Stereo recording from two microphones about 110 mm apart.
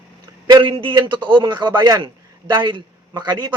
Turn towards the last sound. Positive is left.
turn(degrees=-40)  # may be behind; listen again after turning